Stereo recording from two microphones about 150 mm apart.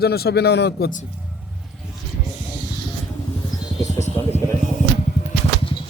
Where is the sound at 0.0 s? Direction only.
90° left.